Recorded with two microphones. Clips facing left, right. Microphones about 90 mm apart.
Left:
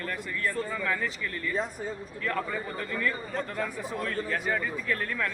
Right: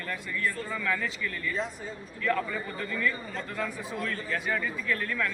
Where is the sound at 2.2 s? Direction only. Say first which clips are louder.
Right 2 dB; 35° left (ahead or behind).